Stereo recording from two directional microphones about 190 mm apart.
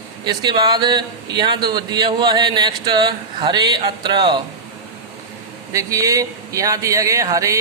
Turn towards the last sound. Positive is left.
turn(degrees=-15)  # may be behind; listen again after turning